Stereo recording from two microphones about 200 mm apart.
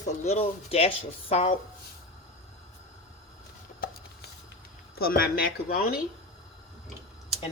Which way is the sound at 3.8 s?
50° left (ahead or behind).